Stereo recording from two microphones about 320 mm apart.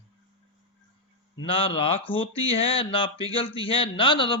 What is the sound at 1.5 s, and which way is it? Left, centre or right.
A man's voice, centre.